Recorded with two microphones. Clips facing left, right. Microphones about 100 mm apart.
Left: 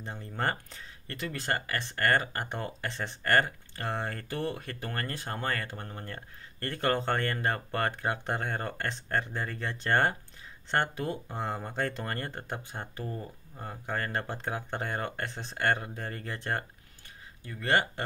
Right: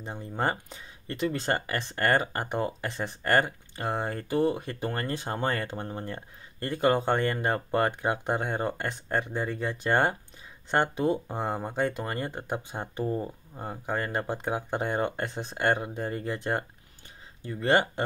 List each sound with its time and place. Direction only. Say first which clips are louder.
0.0 s speech: right 3 dB; 15° right (ahead or behind)